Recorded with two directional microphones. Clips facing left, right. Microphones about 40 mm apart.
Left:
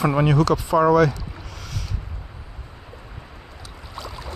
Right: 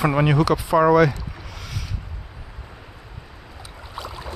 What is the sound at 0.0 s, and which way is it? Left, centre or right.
Speech, centre.